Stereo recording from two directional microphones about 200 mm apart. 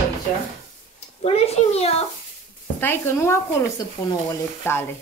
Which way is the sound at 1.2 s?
30° left (ahead or behind).